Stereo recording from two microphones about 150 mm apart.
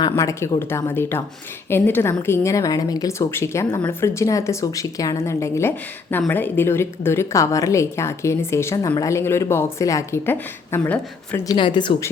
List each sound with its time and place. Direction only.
0.0 s speech: 20° left (ahead or behind)
11.4 s a woman's voice: 30° left (ahead or behind)